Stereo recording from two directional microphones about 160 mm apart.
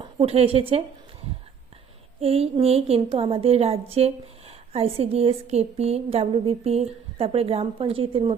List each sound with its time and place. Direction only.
0.0 s a woman's voice: 40° right (ahead or behind)
2.2 s a woman's voice: 40° right (ahead or behind)